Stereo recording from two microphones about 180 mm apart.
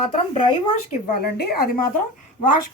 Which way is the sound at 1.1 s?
60° left (ahead or behind).